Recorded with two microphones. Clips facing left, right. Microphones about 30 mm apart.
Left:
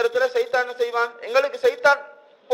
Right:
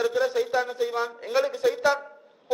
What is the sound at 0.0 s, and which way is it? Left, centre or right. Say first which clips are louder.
A man's voice: left 4 dB; left.